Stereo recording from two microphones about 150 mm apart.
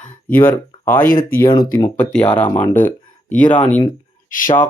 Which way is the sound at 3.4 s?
55° left (ahead or behind).